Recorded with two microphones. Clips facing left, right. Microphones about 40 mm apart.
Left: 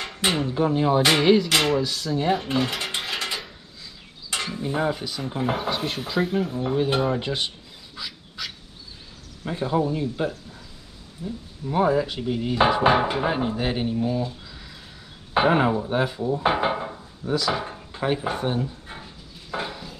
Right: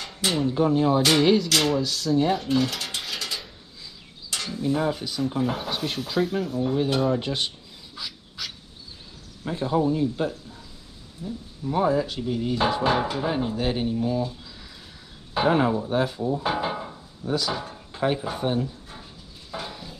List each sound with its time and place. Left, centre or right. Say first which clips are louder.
0.0 s a sound: left 1 dB; left
0.5 s speech: right 2 dB; centre
2.3 s mechanisms: even; left
4.3 s mechanisms: right 1 dB; left
5.2 s speech: even; centre
6.4 s speech: left 1 dB; left
7.2 s rub: left 1 dB; centre
9.4 s speech: even; centre
15.3 s speech: left 2 dB; left; by 16.4 s centre
16.4 s speech: left 4 dB; left
17.9 s speech: even; centre
19.5 s a sound: left 5 dB; left